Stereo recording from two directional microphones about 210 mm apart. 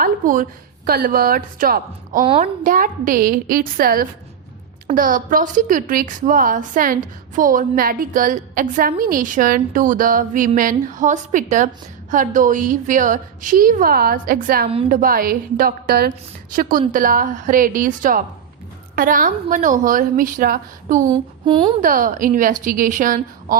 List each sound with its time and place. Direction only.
0.0 s a sound: 40° right (ahead or behind)
0.9 s a woman's voice: 45° right (ahead or behind)
2.2 s speech: 25° right (ahead or behind)
2.6 s a woman's voice: 40° right (ahead or behind)
21.1 s speech: 20° right (ahead or behind)
21.8 s a woman's voice: 40° right (ahead or behind)